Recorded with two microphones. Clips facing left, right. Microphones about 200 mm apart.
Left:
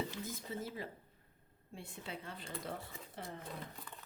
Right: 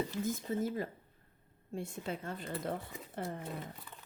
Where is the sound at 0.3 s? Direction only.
45° right (ahead or behind).